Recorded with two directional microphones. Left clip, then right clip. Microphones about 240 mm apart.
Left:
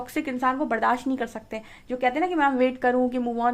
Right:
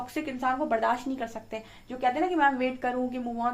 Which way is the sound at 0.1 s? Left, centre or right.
Left.